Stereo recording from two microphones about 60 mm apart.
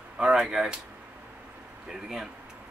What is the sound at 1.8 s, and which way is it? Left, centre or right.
Speech, centre.